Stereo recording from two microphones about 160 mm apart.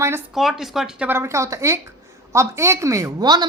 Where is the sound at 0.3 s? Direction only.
Centre (ahead or behind).